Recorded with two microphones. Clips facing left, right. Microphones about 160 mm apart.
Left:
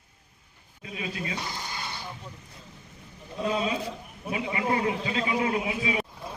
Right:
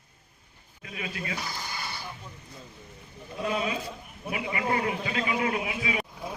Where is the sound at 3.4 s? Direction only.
25° left (ahead or behind).